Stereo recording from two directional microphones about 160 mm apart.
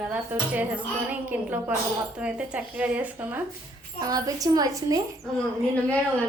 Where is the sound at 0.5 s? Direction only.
10° right (ahead or behind).